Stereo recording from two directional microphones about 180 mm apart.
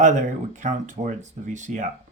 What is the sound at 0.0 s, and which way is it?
Speech, 40° right (ahead or behind).